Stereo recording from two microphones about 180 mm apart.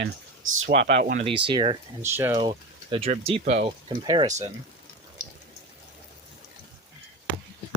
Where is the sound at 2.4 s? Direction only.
30° right (ahead or behind).